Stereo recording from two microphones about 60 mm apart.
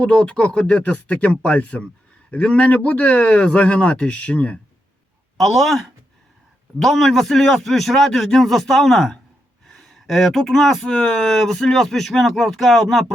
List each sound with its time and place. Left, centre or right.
0.0 s speech: centre
5.4 s speech: centre